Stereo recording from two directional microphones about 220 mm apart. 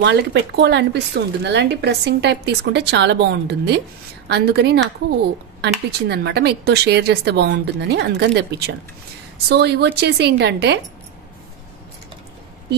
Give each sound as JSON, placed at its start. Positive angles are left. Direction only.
{"t": 0.0, "sound": "speech", "side_deg": -55}